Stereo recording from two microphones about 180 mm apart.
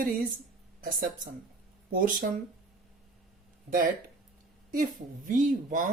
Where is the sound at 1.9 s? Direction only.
50° right (ahead or behind).